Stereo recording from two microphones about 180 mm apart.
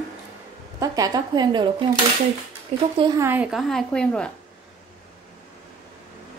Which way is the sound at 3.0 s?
25° right (ahead or behind).